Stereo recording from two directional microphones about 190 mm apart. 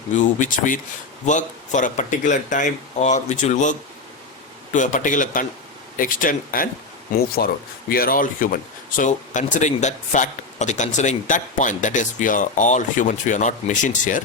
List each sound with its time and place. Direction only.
0.1 s a man's voice: 40° left (ahead or behind)